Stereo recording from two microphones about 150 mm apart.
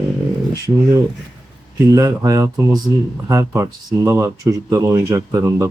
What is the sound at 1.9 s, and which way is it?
Speech, 20° right (ahead or behind).